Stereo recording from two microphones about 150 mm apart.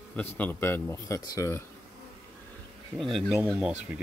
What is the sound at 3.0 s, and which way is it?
Speech, centre (ahead or behind).